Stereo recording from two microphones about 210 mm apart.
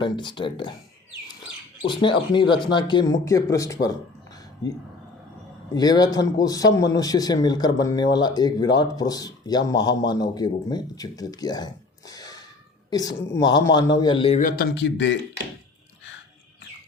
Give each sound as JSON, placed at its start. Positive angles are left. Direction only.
{"t": 0.0, "sound": "a man's voice", "side_deg": 20}
{"t": 1.8, "sound": "a man's voice", "side_deg": 25}
{"t": 5.7, "sound": "a man's voice", "side_deg": 20}
{"t": 14.5, "sound": "speech", "side_deg": 50}